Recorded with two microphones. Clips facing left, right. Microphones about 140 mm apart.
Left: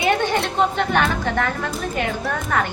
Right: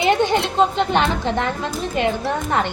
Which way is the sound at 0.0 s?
25° right (ahead or behind).